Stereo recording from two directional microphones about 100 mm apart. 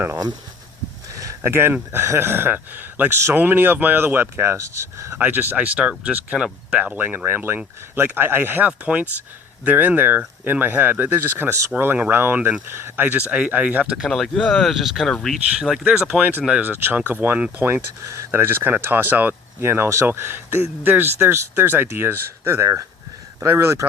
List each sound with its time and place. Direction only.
1.4 s speech: 25° right (ahead or behind)
5.1 s speech: 20° right (ahead or behind)
16.5 s speech: 15° right (ahead or behind)